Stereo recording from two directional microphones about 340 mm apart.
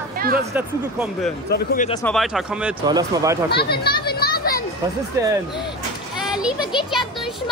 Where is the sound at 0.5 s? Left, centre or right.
Centre.